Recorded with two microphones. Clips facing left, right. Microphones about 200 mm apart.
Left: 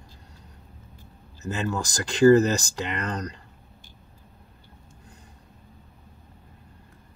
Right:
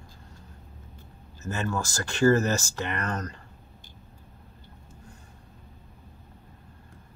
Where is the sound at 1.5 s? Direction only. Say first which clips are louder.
Left 2 dB; 15° left (ahead or behind).